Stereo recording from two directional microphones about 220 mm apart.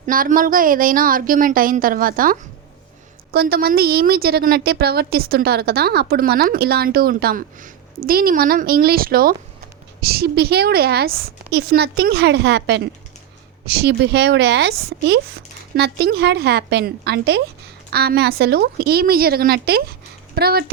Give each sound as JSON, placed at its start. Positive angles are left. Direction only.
{"t": 0.0, "sound": "a woman's voice", "side_deg": -35}